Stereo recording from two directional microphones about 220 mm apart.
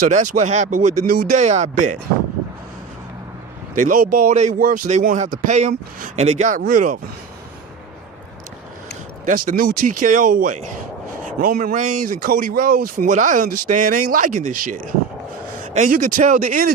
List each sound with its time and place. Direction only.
0.0 s a man's voice: 35° right (ahead or behind)
3.8 s a man's voice: 40° right (ahead or behind)
9.5 s a man's voice: 40° right (ahead or behind)